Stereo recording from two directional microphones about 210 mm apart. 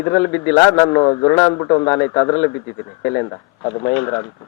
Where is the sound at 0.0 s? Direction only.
15° left (ahead or behind).